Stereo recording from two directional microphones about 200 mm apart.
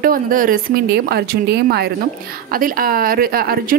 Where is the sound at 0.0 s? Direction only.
45° right (ahead or behind).